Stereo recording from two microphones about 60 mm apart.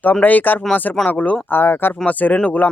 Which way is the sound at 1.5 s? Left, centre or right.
Left.